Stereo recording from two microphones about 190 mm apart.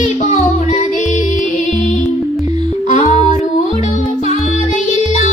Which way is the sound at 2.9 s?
40° left (ahead or behind).